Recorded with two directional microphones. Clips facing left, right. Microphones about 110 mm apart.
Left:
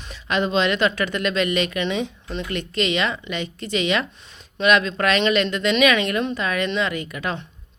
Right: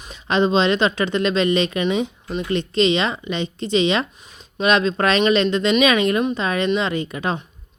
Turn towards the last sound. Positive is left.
turn(degrees=-25)  # may be behind; listen again after turning